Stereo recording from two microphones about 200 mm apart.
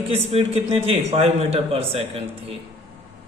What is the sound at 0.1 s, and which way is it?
A man's voice, 30° right (ahead or behind).